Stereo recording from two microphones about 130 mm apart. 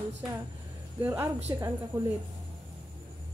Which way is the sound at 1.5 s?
30° right (ahead or behind).